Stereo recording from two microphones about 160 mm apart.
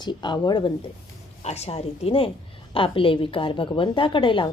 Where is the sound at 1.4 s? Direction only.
40° left (ahead or behind).